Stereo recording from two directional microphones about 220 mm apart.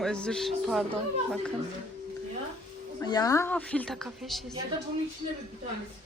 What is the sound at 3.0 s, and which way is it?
A woman's voice, 15° left (ahead or behind).